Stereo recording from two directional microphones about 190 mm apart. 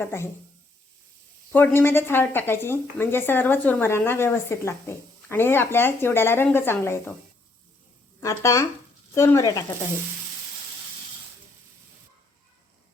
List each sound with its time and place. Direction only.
0.0 s a woman's voice: 15° left (ahead or behind)
1.5 s a woman's voice: 10° left (ahead or behind)
8.2 s a woman's voice: 15° left (ahead or behind)